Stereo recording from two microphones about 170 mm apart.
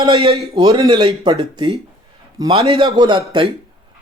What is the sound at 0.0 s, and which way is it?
Speech, 35° right (ahead or behind).